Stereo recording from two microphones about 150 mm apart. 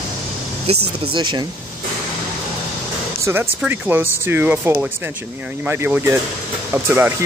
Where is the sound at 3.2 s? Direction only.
15° right (ahead or behind).